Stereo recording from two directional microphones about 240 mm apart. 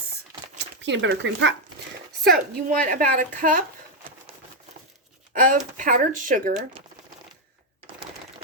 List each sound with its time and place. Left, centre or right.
0.6 s speech: right
2.2 s speech: right
5.3 s speech: right